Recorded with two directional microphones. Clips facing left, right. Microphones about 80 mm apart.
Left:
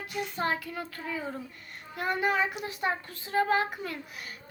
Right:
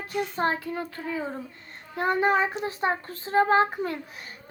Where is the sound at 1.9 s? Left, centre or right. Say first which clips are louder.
Right 5 dB; right.